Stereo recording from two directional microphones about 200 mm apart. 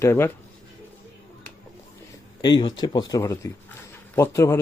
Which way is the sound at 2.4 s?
20° left (ahead or behind).